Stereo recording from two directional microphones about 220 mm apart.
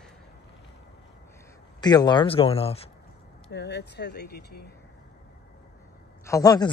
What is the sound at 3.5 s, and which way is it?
Speech, 50° left (ahead or behind).